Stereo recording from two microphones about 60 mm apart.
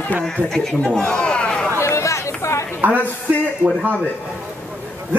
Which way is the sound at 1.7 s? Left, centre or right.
Left.